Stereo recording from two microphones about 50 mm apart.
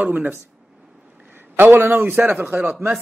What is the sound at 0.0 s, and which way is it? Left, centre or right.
Speech, right.